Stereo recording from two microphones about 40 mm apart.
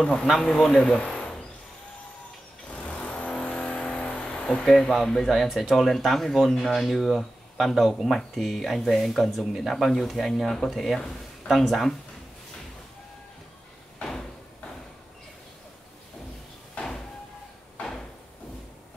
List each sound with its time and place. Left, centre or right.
0.0 s a man's voice: left
0.3 s a man's voice: centre
0.9 s a sound: left
2.9 s vehicle: left
4.6 s speech: centre
16.7 s a sound: left